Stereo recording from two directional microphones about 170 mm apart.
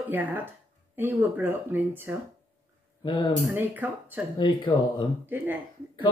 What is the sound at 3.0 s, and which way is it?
Speech, 25° left (ahead or behind).